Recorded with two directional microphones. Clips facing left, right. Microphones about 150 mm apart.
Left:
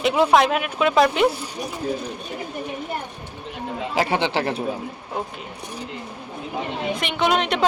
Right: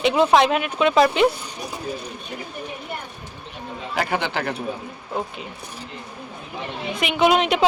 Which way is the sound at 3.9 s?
30° left (ahead or behind).